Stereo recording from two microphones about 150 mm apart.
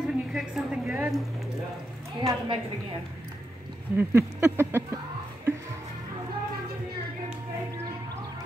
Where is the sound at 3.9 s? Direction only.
15° right (ahead or behind).